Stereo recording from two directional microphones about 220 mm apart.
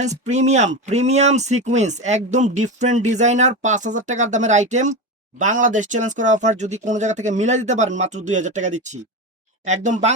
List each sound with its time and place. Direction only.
0.0 s speech: 30° right (ahead or behind)